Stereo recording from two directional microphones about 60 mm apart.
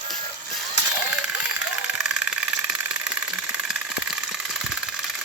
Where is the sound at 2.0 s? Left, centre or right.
Centre.